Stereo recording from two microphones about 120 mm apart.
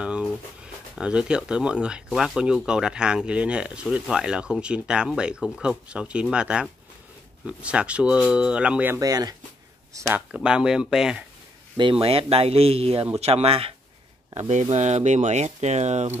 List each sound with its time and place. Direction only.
0.0 s speech: 10° right (ahead or behind)
9.0 s speech: 30° right (ahead or behind)
10.3 s speech: 5° right (ahead or behind)
11.7 s speech: 45° right (ahead or behind)
14.5 s speech: 75° right (ahead or behind)